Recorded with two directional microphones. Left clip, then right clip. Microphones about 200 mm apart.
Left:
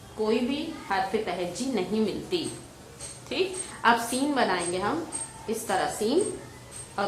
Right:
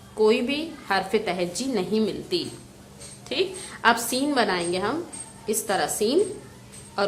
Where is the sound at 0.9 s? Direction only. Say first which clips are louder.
Right 3 dB; 25° right (ahead or behind).